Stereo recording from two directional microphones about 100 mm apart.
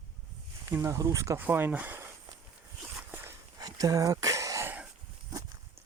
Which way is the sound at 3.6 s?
35° right (ahead or behind).